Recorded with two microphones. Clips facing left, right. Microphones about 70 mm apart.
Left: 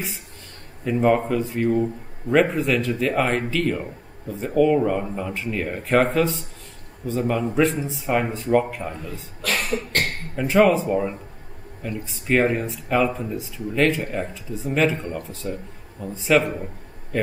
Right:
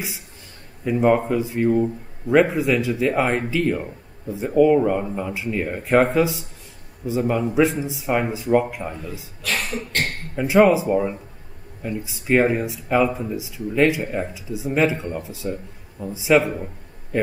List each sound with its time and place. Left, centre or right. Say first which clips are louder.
0.8 s a man's voice: right 1 dB; centre
8.9 s a man's voice: right 1 dB; left
9.4 s cough: left 2 dB; left
10.3 s a man's voice: right 2 dB; centre